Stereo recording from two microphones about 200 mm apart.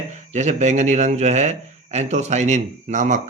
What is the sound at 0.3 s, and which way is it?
A man's voice, 35° right (ahead or behind).